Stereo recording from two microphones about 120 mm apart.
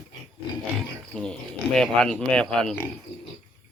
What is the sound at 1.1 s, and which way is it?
Speech, 5° left (ahead or behind).